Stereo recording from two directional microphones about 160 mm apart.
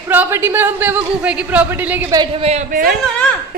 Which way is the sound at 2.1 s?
25° right (ahead or behind).